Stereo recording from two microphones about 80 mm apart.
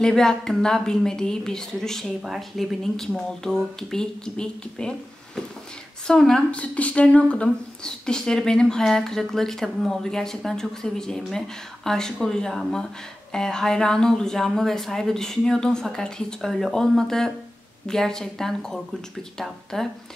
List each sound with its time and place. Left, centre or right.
0.0 s speech: centre